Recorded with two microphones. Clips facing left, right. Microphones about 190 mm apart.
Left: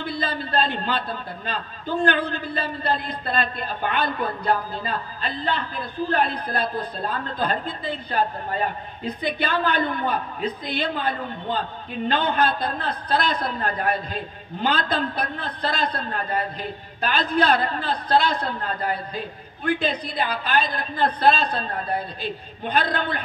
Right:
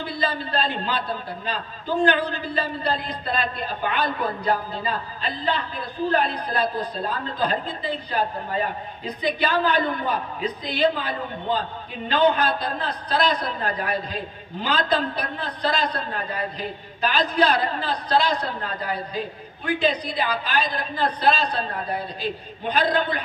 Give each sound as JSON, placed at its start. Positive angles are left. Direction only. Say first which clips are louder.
{"t": 0.0, "sound": "a woman's voice", "louder": "right 1 dB", "side_deg": 50}